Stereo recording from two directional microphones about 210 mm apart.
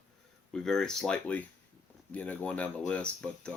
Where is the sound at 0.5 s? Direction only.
5° left (ahead or behind).